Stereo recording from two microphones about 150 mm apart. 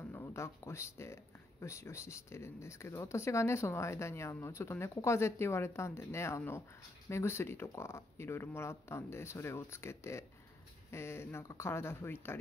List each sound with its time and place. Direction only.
0.1 s speech: 20° left (ahead or behind)